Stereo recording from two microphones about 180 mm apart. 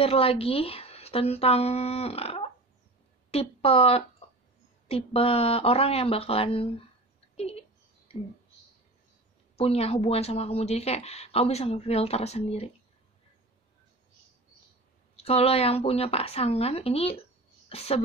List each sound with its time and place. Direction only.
0.0 s a woman's voice: 35° left (ahead or behind)
9.6 s a woman's voice: 35° left (ahead or behind)
15.1 s a woman's voice: 35° left (ahead or behind)